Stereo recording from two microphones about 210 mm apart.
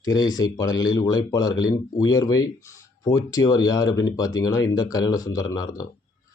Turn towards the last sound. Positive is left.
turn(degrees=15)  # may be behind; listen again after turning